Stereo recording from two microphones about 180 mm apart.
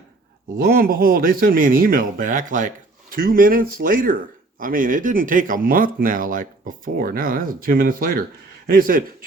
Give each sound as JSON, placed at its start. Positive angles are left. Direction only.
{"t": 0.6, "sound": "speech", "side_deg": -55}